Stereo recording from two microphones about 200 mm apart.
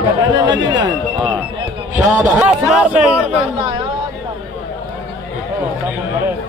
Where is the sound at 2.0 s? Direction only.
5° right (ahead or behind).